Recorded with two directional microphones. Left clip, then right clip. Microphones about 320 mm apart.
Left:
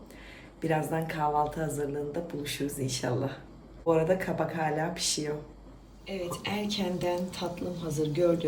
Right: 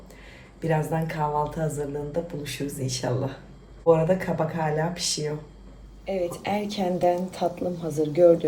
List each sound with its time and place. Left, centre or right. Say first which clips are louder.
0.6 s speech: right 3 dB; centre